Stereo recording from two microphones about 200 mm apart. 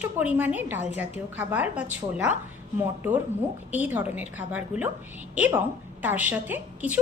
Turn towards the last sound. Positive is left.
turn(degrees=-10)  # may be behind; listen again after turning